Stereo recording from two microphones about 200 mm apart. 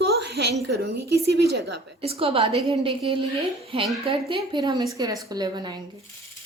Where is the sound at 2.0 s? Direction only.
30° right (ahead or behind).